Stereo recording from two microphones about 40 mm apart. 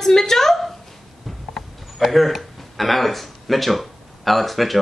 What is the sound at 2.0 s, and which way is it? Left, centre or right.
A woman's voice, centre.